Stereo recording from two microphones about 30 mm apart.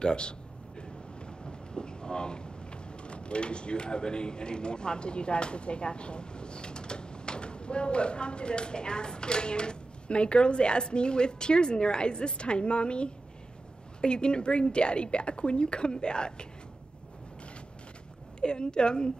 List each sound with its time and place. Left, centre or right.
0.0 s a woman's voice: left
18.4 s a woman's voice: left